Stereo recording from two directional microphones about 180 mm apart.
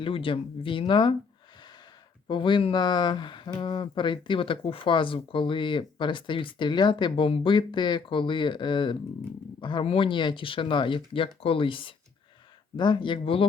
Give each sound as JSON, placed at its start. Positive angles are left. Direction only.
{"t": 0.0, "sound": "speech", "side_deg": 30}
{"t": 2.2, "sound": "speech", "side_deg": 25}